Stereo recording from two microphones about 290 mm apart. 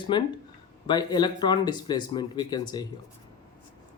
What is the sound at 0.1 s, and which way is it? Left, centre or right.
Speech, centre.